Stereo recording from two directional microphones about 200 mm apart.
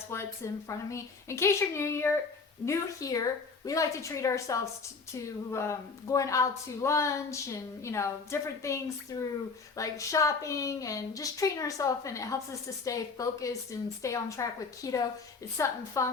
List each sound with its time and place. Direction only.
0.1 s a woman's voice: 15° left (ahead or behind)